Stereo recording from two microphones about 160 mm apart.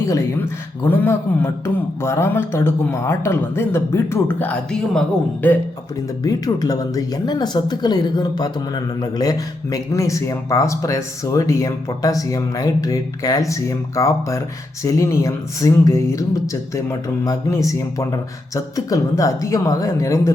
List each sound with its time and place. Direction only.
0.9 s a man's voice: 15° left (ahead or behind)
6.2 s speech: 25° left (ahead or behind)